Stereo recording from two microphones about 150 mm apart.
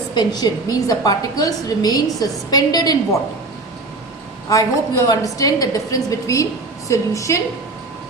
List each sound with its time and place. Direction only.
0.1 s a woman's voice: 25° left (ahead or behind)
4.4 s a woman's voice: 20° left (ahead or behind)